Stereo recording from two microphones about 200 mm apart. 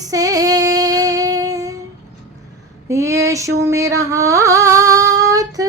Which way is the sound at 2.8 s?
15° right (ahead or behind).